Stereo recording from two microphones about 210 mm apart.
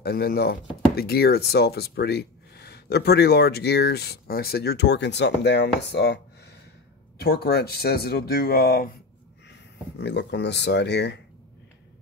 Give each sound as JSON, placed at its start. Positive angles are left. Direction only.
{"t": 0.0, "sound": "speech", "side_deg": 50}
{"t": 9.9, "sound": "speech", "side_deg": 55}